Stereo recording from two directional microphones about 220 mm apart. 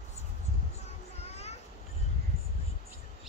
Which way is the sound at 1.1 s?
30° left (ahead or behind).